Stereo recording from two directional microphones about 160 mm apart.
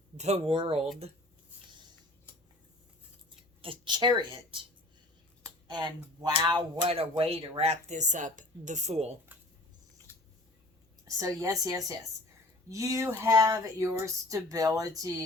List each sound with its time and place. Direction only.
0.2 s speech: 40° right (ahead or behind)
3.6 s speech: 30° right (ahead or behind)
5.6 s speech: 30° right (ahead or behind)
10.1 s a sound: 15° left (ahead or behind)
11.0 s speech: 20° right (ahead or behind)